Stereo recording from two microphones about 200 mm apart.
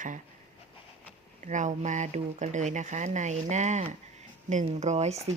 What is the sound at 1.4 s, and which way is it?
Speech, 35° right (ahead or behind).